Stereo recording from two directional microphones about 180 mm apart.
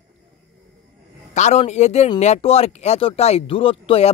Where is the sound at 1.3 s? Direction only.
40° left (ahead or behind).